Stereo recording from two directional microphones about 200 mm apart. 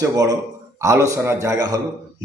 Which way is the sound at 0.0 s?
15° right (ahead or behind).